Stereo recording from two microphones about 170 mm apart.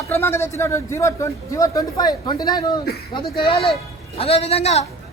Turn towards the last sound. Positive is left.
turn(degrees=40)  # may be behind; listen again after turning